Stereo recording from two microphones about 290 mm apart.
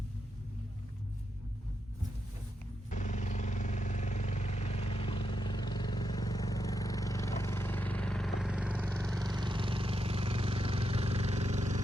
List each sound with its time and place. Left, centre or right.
2.9 s vehicle: left; by 9.1 s centre
9.1 s vehicle: centre